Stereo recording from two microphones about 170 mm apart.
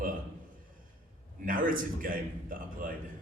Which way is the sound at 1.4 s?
55° right (ahead or behind).